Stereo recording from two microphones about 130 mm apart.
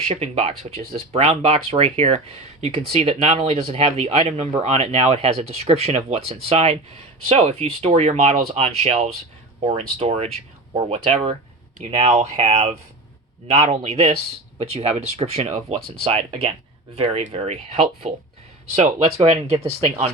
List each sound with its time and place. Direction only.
0.1 s speech: 50° right (ahead or behind)